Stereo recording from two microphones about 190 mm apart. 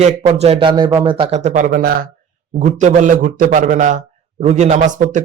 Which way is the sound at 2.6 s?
40° right (ahead or behind).